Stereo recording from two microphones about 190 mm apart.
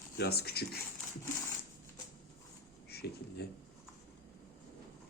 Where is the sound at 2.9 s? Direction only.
55° left (ahead or behind).